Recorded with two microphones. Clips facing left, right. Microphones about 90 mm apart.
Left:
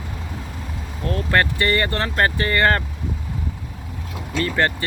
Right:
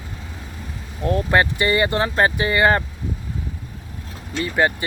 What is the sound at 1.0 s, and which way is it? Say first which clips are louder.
Speech: right 2 dB; 20° right (ahead or behind).